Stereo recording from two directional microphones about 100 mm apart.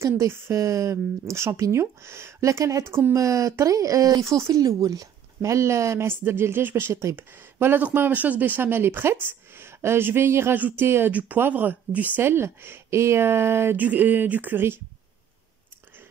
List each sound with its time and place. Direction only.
0.0 s speech: 25° right (ahead or behind)